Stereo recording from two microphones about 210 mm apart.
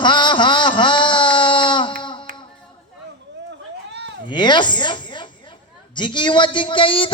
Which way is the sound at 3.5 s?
55° right (ahead or behind).